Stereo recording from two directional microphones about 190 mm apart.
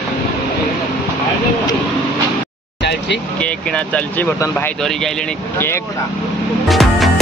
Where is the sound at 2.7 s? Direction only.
65° left (ahead or behind).